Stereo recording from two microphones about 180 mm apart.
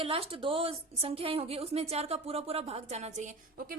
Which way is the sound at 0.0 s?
30° right (ahead or behind).